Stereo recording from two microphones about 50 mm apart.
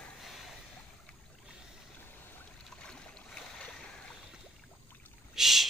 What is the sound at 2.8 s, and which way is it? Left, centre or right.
Boat, centre.